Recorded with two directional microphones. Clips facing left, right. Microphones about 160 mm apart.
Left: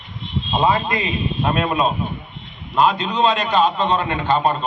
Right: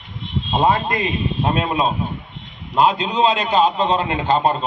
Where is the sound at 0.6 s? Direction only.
50° right (ahead or behind).